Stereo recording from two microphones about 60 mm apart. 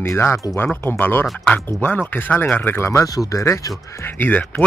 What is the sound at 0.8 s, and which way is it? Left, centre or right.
Speech, left.